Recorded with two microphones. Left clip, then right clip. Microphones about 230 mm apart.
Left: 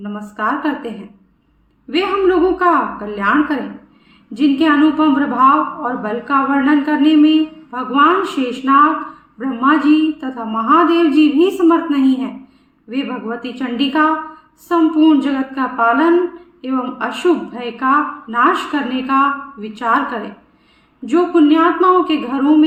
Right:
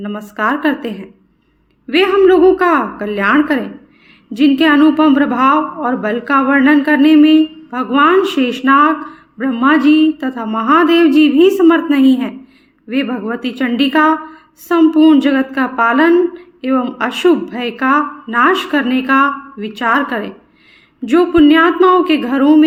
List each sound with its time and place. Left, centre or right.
0.0 s a woman's voice: right
1.9 s a woman's voice: right